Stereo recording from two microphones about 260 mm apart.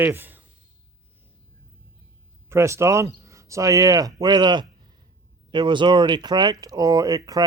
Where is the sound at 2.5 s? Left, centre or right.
Centre.